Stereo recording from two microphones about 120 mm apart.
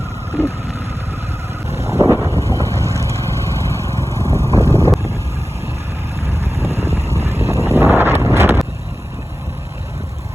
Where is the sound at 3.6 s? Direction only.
25° left (ahead or behind).